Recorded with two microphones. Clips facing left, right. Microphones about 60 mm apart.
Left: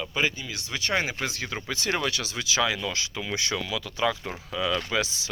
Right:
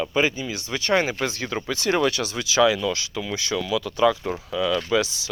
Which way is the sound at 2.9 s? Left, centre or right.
Left.